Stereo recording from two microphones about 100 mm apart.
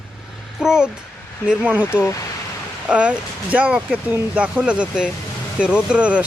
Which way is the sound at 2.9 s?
15° right (ahead or behind).